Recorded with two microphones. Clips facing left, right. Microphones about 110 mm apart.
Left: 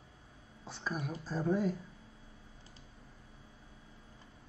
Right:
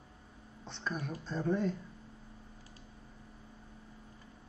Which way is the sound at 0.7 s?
5° left (ahead or behind).